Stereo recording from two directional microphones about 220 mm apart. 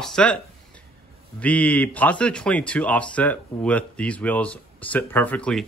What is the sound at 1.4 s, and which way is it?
Speech, 5° left (ahead or behind).